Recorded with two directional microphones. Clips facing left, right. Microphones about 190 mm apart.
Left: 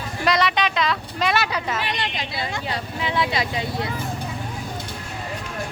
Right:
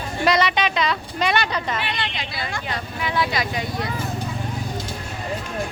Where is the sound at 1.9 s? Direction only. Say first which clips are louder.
Left 1 dB; 40° left (ahead or behind).